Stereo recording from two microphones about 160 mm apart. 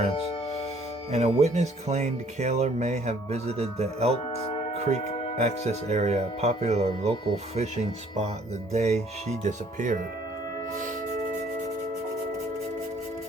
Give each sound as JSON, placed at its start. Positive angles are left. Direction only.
{"t": 1.1, "sound": "speech", "side_deg": -40}
{"t": 5.4, "sound": "speech", "side_deg": -45}
{"t": 8.7, "sound": "speech", "side_deg": -45}